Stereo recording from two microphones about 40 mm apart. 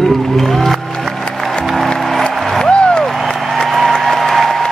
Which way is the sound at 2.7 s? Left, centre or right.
Left.